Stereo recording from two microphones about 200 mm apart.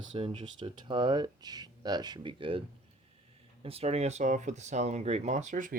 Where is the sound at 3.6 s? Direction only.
30° right (ahead or behind).